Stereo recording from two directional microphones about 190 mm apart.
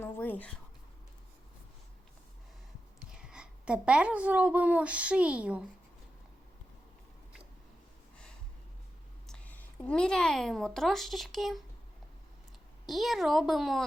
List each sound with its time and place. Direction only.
0.0 s a sound: 10° left (ahead or behind)
3.1 s a woman's voice: 5° right (ahead or behind)
9.2 s speech: 5° left (ahead or behind)
12.8 s a woman's voice: centre (ahead or behind)